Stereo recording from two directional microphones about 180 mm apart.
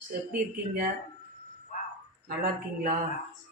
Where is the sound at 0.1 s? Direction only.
55° right (ahead or behind).